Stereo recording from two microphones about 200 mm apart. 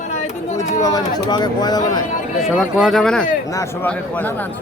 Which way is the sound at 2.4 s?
Centre (ahead or behind).